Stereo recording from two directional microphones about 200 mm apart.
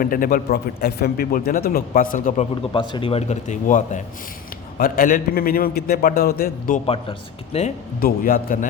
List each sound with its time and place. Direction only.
0.0 s speech: 45° left (ahead or behind)
2.7 s a man's voice: 25° left (ahead or behind); by 6.8 s 45° left (ahead or behind)
6.8 s speech: 30° left (ahead or behind)
8.0 s speech: 45° left (ahead or behind)